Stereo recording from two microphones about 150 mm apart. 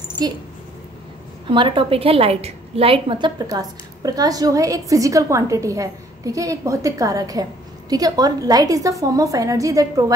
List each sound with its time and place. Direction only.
0.2 s a woman's voice: 25° right (ahead or behind)
1.5 s a woman's voice: 35° right (ahead or behind)